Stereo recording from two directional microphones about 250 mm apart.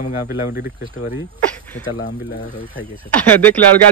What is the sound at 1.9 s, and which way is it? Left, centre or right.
Speech, left.